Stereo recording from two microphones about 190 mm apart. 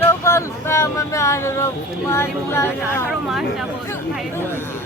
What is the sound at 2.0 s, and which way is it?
Speech, 15° left (ahead or behind).